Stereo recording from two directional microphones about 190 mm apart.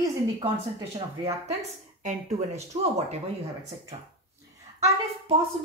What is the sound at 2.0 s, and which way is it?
Speech, 35° right (ahead or behind).